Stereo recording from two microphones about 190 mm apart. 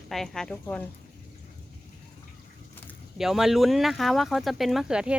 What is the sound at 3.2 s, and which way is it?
Speech, centre (ahead or behind).